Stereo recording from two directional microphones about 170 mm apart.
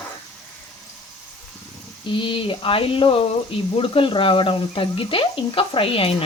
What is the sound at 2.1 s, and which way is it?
Speech, 30° left (ahead or behind).